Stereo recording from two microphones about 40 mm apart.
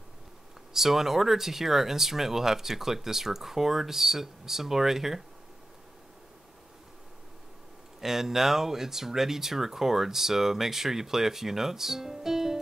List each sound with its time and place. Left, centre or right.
0.7 s speech: centre
8.0 s speech: centre